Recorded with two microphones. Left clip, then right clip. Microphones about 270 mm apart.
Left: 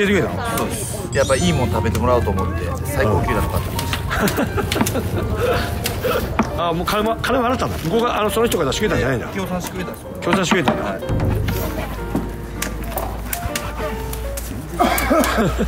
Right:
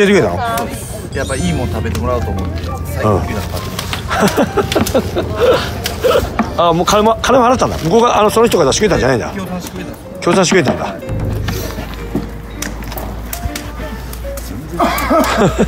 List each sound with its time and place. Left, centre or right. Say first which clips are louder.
0.0 s speech: right 7 dB; centre
1.1 s speech: left 2 dB; centre
4.1 s speech: right 8 dB; centre
14.8 s a sound: right 4 dB; centre